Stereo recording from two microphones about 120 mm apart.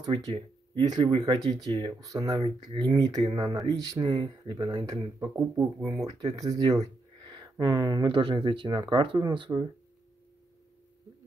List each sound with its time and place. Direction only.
0.1 s speech: 40° right (ahead or behind)